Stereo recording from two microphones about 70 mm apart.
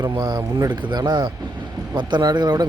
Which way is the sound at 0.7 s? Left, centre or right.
Right.